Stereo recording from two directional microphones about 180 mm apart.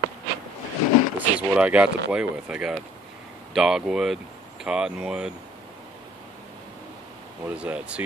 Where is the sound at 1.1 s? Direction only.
5° right (ahead or behind).